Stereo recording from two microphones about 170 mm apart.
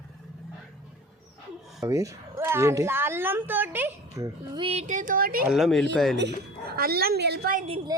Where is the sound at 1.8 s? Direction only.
20° right (ahead or behind).